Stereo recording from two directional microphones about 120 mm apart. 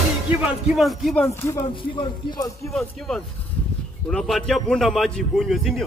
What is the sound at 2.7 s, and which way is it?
A man's voice, 5° left (ahead or behind).